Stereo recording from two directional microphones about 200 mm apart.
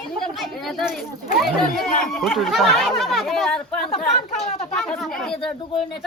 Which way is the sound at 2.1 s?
Centre (ahead or behind).